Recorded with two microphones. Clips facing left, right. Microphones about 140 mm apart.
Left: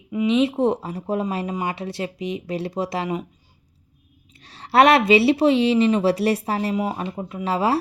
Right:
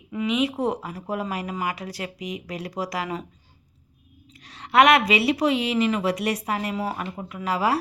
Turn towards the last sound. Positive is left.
turn(degrees=25)  # may be behind; listen again after turning